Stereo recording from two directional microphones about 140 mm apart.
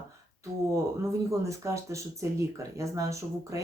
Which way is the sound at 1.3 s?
20° right (ahead or behind).